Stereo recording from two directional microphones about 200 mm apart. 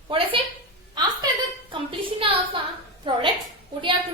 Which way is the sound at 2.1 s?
25° right (ahead or behind).